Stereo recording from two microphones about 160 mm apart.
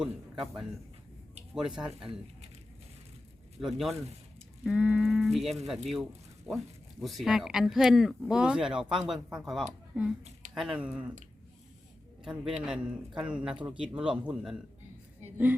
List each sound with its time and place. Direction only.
0.0 s a man's voice: 5° right (ahead or behind)
1.6 s speech: 5° right (ahead or behind)
3.6 s speech: centre (ahead or behind)
12.2 s speech: 5° right (ahead or behind)